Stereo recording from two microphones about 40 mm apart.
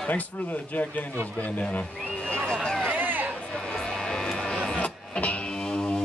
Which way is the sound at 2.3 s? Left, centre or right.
Left.